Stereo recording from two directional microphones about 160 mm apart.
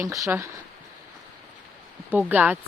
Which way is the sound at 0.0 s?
20° right (ahead or behind).